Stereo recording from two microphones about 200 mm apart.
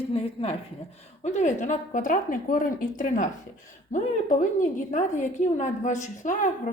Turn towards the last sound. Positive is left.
turn(degrees=40)  # may be behind; listen again after turning